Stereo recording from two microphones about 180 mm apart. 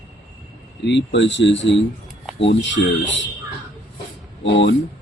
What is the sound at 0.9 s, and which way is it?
Speech, 80° left.